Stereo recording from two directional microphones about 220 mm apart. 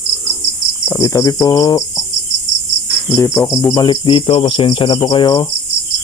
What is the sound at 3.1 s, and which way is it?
Speech, 15° left (ahead or behind).